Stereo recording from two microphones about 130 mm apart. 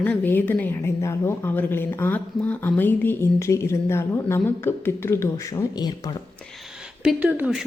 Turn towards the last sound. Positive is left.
turn(degrees=-10)  # may be behind; listen again after turning